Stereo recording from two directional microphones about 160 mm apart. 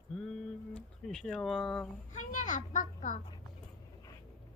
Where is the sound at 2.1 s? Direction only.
50° left (ahead or behind).